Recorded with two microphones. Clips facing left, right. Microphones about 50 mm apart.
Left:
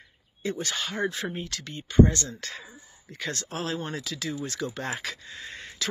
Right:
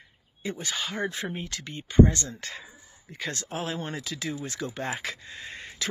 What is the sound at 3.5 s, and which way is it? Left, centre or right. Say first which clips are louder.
Speech: left 1 dB; centre.